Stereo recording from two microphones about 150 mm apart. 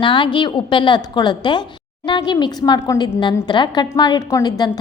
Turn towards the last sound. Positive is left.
turn(degrees=25)  # may be behind; listen again after turning